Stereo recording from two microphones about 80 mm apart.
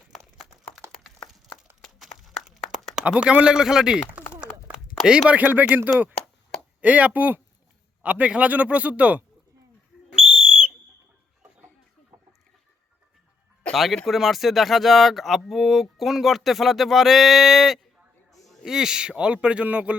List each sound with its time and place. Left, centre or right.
1.8 s a sound: centre
5.3 s a man's voice: right
12.1 s chicken: right
13.7 s a man's voice: centre